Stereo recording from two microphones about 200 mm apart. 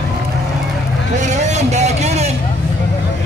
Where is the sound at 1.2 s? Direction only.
35° right (ahead or behind).